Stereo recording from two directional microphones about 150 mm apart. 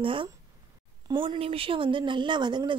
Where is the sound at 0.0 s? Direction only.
35° right (ahead or behind).